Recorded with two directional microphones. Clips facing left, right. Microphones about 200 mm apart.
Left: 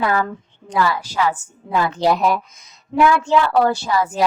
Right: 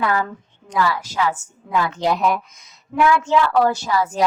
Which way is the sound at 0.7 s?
30° left (ahead or behind).